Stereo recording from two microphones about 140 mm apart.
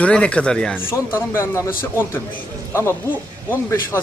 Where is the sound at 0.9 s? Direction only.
20° left (ahead or behind).